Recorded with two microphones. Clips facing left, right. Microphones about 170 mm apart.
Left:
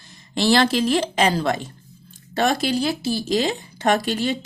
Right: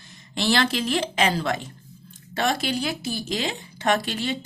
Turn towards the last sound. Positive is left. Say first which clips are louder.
# left 4 dB
turn(degrees=40)  # may be behind; listen again after turning